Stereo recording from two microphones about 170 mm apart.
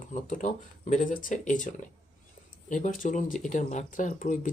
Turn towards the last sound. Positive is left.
turn(degrees=50)  # may be behind; listen again after turning